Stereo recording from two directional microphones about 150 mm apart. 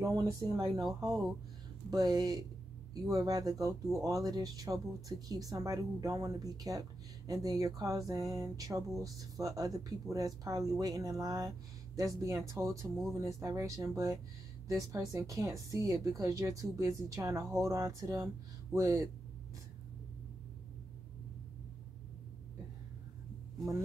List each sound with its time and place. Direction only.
0.0 s speech: 25° right (ahead or behind)
0.8 s speech: centre (ahead or behind)
1.9 s speech: 25° right (ahead or behind)